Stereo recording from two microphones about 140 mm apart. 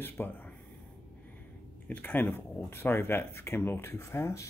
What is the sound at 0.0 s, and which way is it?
Speech, 15° left (ahead or behind).